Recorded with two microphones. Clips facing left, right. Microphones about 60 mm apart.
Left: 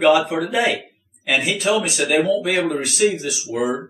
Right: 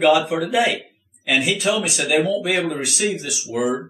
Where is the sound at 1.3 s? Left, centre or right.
Left.